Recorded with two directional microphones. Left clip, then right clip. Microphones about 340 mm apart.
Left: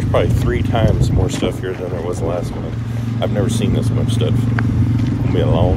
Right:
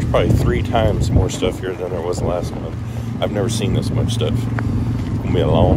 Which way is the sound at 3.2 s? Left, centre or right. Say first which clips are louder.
Even; centre.